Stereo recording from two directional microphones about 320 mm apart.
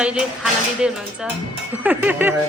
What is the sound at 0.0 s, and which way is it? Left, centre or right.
Speech, centre.